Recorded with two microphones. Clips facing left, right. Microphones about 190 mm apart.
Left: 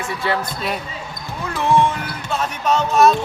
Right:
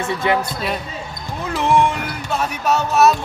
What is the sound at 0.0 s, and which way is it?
Speech, 20° right (ahead or behind).